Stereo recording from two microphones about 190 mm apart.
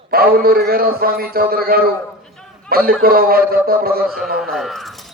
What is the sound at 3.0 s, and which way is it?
A man's voice, 50° right (ahead or behind).